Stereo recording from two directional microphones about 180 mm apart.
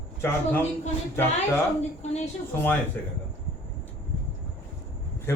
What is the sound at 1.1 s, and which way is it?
Speech, 15° left (ahead or behind).